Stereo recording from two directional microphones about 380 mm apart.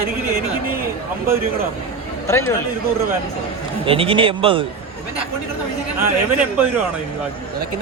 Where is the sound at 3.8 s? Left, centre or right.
Centre.